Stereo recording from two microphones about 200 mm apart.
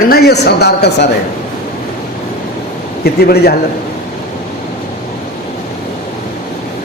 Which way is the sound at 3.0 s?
50° left (ahead or behind).